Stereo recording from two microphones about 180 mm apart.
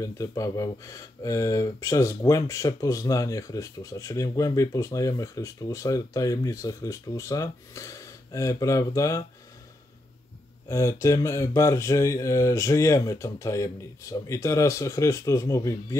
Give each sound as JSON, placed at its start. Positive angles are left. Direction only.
{"t": 0.0, "sound": "speech", "side_deg": 20}
{"t": 10.7, "sound": "speech", "side_deg": 15}